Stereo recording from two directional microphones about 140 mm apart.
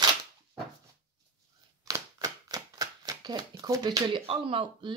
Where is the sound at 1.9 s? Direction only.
25° right (ahead or behind).